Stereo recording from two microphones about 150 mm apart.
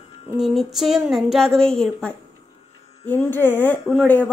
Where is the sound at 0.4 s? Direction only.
Centre (ahead or behind).